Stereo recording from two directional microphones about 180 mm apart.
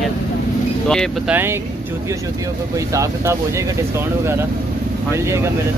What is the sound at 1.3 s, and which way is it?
Speech, 15° right (ahead or behind).